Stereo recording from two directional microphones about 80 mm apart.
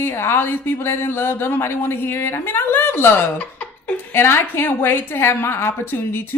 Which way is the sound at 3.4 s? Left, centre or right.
Centre.